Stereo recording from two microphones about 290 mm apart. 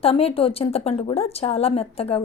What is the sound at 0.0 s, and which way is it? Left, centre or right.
A woman's voice, centre.